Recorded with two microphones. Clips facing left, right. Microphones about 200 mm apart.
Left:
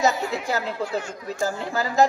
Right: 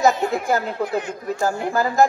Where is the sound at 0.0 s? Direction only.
50° right (ahead or behind).